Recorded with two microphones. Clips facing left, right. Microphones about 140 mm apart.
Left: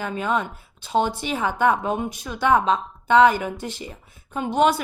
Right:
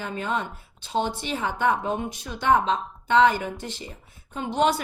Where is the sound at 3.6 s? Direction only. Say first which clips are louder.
Left 4 dB; 10° left (ahead or behind).